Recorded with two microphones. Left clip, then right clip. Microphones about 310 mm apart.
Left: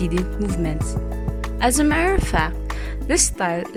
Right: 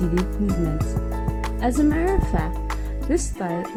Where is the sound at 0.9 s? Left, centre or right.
Centre.